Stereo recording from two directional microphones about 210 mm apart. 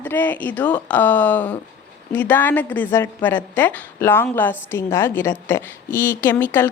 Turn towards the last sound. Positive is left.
turn(degrees=10)  # may be behind; listen again after turning